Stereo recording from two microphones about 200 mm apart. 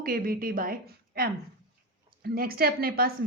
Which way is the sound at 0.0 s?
45° right (ahead or behind).